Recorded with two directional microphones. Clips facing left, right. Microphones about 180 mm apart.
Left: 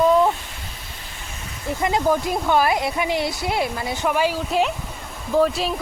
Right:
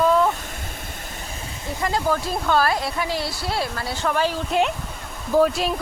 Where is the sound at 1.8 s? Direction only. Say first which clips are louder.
Left 3 dB; 20° left (ahead or behind).